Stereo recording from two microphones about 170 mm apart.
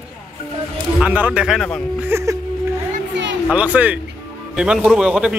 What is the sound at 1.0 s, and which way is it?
Speech, 10° right (ahead or behind).